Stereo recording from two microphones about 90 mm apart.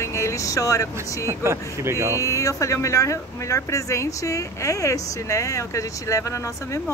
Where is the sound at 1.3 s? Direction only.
30° right (ahead or behind).